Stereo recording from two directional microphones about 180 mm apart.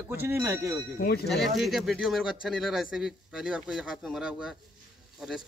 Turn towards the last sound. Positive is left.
turn(degrees=-5)  # may be behind; listen again after turning